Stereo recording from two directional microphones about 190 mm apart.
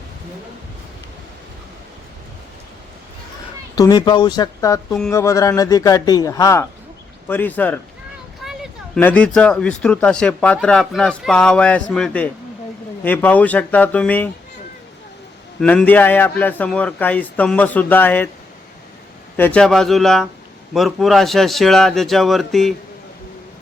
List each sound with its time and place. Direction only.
3.8 s a man's voice: 20° left (ahead or behind)
8.4 s a sound: centre (ahead or behind)
9.0 s a man's voice: 10° left (ahead or behind)
15.6 s a man's voice: 5° left (ahead or behind)
19.4 s speech: 5° left (ahead or behind)